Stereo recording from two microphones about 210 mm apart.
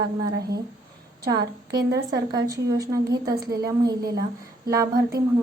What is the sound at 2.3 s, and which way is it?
Speech, 15° right (ahead or behind).